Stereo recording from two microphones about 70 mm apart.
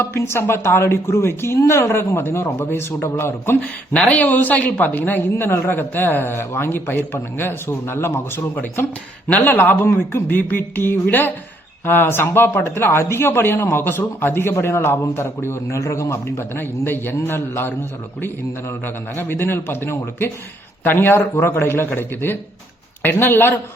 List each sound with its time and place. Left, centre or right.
0.0 s speech: left
3.6 s speech: centre; by 8.2 s left
9.3 s speech: left
16.6 s speech: left
19.1 s speech: left